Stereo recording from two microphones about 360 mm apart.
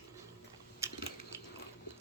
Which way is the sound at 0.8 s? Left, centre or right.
Centre.